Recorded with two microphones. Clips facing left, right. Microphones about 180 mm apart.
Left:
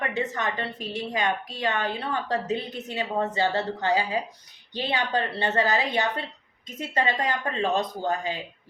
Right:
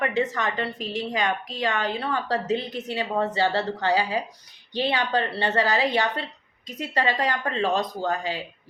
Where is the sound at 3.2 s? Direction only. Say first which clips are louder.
Right 1 dB; 20° left (ahead or behind).